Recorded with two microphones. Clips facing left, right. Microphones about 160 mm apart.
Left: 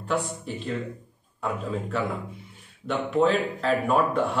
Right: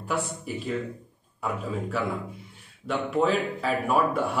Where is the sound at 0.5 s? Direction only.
10° right (ahead or behind).